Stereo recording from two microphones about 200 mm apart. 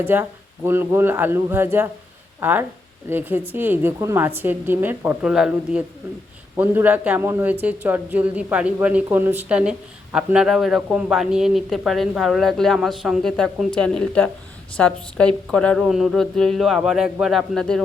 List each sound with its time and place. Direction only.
0.0 s speech: 10° right (ahead or behind)